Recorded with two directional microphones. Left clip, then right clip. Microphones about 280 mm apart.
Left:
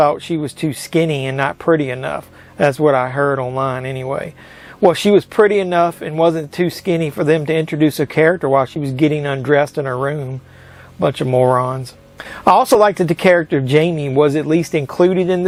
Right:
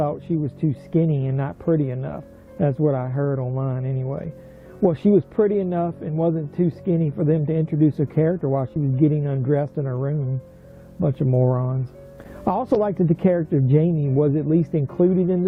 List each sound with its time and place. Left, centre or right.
0.0 s speech: centre
11.3 s speech: centre